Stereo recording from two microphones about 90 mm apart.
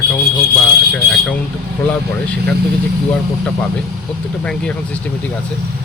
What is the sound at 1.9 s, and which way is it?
Speech, 15° left (ahead or behind).